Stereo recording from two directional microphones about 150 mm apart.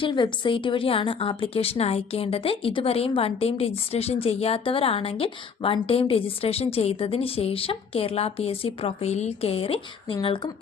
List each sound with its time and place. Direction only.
0.0 s a woman's voice: 30° left (ahead or behind)